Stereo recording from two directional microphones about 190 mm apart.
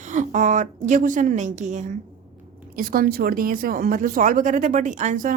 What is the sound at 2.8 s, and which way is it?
A woman's voice, 50° right (ahead or behind).